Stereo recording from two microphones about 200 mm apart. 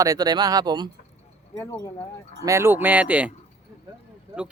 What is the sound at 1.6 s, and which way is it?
Speech, 15° left (ahead or behind).